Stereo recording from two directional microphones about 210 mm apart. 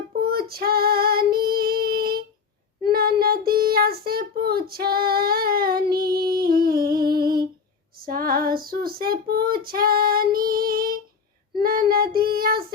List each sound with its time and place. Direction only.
0.2 s child singing: 45° right (ahead or behind)